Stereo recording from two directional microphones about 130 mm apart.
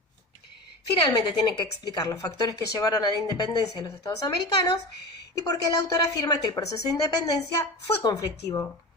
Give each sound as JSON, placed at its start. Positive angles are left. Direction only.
{"t": 0.9, "sound": "a woman's voice", "side_deg": 35}